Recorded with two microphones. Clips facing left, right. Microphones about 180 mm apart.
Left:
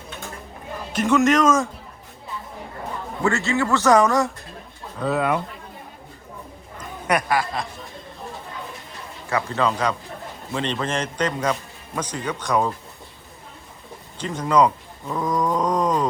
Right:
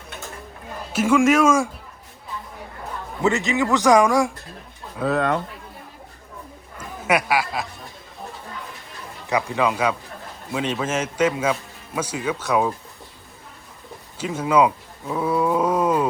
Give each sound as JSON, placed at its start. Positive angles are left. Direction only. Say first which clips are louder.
{"t": 0.9, "sound": "speech", "louder": "right 1 dB", "side_deg": -5}
{"t": 3.2, "sound": "speech", "louder": "right 1 dB", "side_deg": -15}
{"t": 4.9, "sound": "speech", "louder": "right 1 dB", "side_deg": 0}
{"t": 6.7, "sound": "speech", "louder": "right 1 dB", "side_deg": -5}
{"t": 9.3, "sound": "speech", "louder": "right 1 dB", "side_deg": -10}
{"t": 14.2, "sound": "speech", "louder": "even", "side_deg": -5}